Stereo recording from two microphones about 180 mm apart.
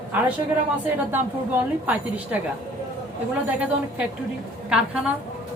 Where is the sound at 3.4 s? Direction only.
5° right (ahead or behind).